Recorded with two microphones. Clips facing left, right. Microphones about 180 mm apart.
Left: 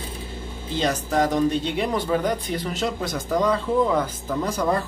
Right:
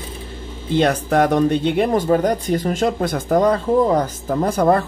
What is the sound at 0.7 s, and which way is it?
A man's voice, 60° right (ahead or behind).